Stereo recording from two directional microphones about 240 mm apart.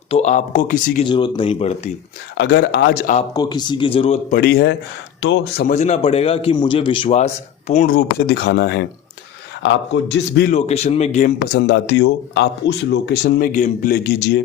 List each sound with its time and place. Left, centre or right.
0.1 s a man's voice: left
1.1 s a man's voice: centre
2.4 s speech: left
3.2 s a man's voice: centre
4.4 s speech: left
5.6 s a man's voice: left
10.5 s a man's voice: left
11.5 s speech: left